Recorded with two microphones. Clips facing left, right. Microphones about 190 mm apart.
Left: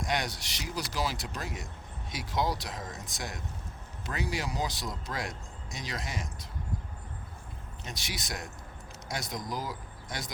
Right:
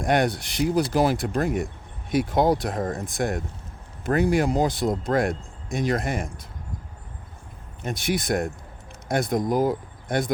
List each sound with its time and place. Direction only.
0.0 s speech: 55° right (ahead or behind)
7.8 s speech: 55° right (ahead or behind)